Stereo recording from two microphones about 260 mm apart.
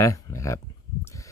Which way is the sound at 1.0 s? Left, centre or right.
Centre.